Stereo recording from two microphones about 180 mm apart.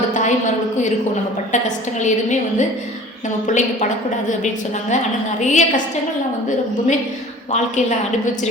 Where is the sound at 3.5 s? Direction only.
40° left (ahead or behind).